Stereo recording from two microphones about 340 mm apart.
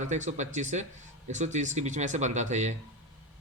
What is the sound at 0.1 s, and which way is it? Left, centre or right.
A man's voice, right.